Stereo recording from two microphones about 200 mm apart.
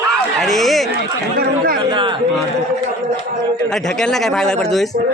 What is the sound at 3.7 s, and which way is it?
Speech, centre (ahead or behind).